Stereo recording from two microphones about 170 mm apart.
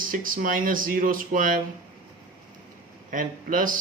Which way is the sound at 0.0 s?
55° right (ahead or behind).